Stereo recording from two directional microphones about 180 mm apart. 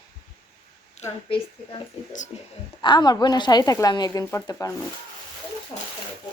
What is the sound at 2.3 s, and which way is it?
A woman's voice, 30° left (ahead or behind).